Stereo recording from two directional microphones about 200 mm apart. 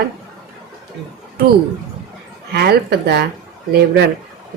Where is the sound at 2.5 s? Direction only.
55° right (ahead or behind).